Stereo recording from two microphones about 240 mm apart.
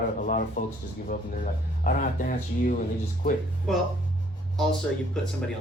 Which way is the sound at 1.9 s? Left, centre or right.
Left.